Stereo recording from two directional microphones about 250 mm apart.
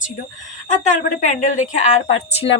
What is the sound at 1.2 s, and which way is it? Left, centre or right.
Speech, left.